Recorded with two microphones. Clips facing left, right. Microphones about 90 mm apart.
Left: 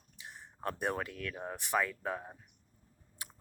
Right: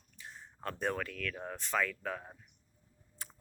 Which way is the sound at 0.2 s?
15° left (ahead or behind).